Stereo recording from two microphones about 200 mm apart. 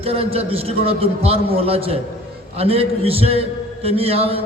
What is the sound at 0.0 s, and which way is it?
A man's voice, 30° right (ahead or behind).